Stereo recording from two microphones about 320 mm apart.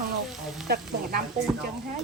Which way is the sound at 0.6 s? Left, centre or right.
Right.